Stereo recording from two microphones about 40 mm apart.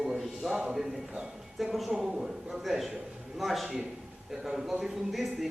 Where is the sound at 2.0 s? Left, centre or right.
Centre.